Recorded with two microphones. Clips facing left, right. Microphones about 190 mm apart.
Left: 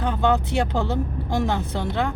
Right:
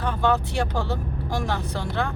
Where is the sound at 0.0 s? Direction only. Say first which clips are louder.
Left 2 dB; 20° left (ahead or behind).